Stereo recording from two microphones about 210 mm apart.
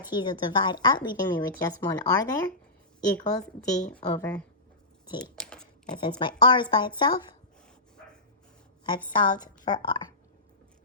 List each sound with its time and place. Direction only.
0.1 s speech: 20° left (ahead or behind)
3.2 s a woman's voice: 5° left (ahead or behind)
5.4 s a sound: 5° left (ahead or behind)
5.8 s speech: 20° left (ahead or behind)
9.1 s speech: 20° left (ahead or behind)